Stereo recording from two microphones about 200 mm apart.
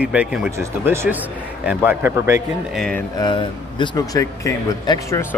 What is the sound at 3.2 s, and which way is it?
Speech, 20° left (ahead or behind).